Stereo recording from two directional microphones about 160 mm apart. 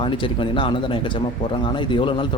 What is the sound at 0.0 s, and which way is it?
A man's voice, 30° left (ahead or behind).